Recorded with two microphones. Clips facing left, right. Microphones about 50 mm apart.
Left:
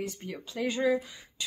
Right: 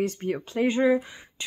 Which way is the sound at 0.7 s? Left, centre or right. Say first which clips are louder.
Right 5 dB; right.